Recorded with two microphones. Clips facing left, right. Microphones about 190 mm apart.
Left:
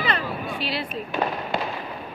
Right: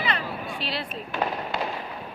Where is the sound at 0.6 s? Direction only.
5° left (ahead or behind).